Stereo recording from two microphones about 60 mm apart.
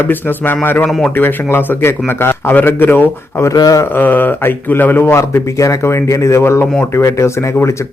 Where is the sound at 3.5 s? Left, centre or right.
Left.